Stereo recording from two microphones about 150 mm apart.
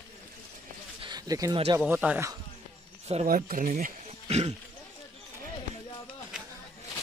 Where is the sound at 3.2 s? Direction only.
70° right (ahead or behind).